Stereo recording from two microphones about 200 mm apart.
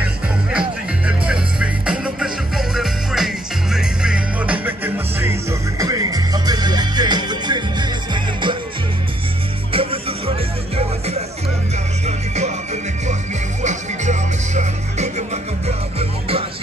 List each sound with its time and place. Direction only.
0.0 s music: 5° right (ahead or behind); by 8.5 s 25° right (ahead or behind)
9.7 s music: 30° right (ahead or behind)
13.6 s music: 35° right (ahead or behind)